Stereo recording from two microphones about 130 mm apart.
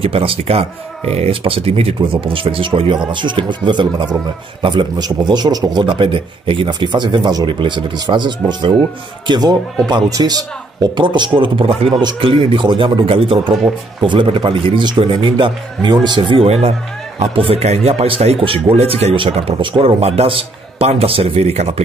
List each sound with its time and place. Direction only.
0.0 s speech: 45° right (ahead or behind)